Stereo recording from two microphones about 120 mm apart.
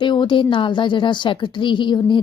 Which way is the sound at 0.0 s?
40° left (ahead or behind).